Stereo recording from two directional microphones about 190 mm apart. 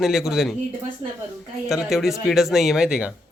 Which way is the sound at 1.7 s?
Centre (ahead or behind).